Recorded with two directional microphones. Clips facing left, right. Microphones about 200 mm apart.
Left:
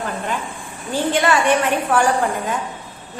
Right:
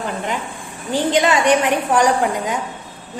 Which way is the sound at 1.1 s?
20° right (ahead or behind).